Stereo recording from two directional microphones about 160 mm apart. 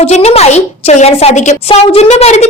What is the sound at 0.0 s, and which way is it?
A woman's voice, 45° left (ahead or behind).